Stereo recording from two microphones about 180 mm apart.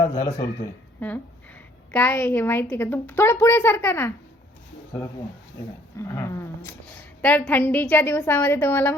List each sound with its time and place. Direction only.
0.0 s a sound: 15° left (ahead or behind)
0.9 s a woman's voice: 10° left (ahead or behind)
6.0 s a woman's voice: 15° left (ahead or behind)